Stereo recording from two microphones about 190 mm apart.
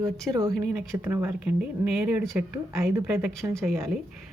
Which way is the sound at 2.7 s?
15° right (ahead or behind).